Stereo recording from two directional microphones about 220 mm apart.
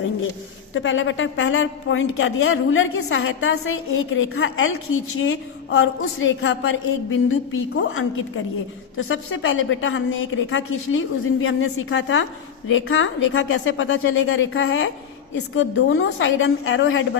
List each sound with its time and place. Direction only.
0.7 s a woman's voice: 60° left (ahead or behind)